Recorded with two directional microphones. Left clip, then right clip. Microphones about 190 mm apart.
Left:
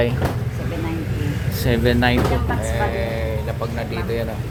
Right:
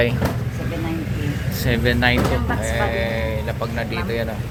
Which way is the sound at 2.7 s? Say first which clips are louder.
Right 2 dB; 10° left (ahead or behind).